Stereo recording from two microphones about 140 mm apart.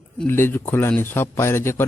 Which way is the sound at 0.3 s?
15° left (ahead or behind).